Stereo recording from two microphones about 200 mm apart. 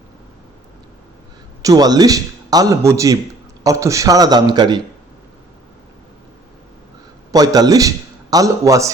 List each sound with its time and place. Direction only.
1.6 s a man's voice: 20° right (ahead or behind)
7.3 s a man's voice: 20° right (ahead or behind)